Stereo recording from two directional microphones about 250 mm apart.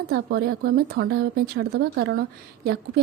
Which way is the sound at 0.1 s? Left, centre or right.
Right.